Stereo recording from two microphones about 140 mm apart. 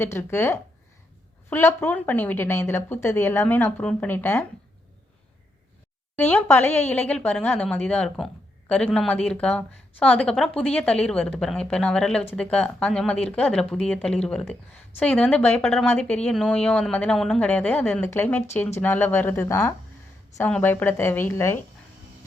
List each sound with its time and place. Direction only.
0.0 s speech: 15° left (ahead or behind)
6.1 s speech: 10° left (ahead or behind)